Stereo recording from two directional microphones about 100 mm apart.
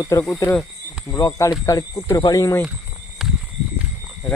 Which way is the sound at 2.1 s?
45° left (ahead or behind).